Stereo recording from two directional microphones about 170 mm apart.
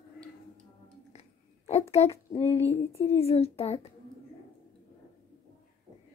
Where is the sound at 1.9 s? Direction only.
35° left (ahead or behind).